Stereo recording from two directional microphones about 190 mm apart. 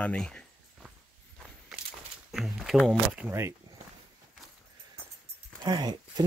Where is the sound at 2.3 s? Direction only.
Centre (ahead or behind).